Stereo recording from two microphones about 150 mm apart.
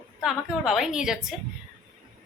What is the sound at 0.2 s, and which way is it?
A woman's voice, 5° right (ahead or behind).